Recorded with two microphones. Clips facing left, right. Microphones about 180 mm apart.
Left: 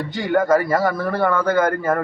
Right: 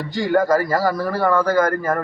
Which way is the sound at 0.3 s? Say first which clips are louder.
Left 1 dB; centre (ahead or behind).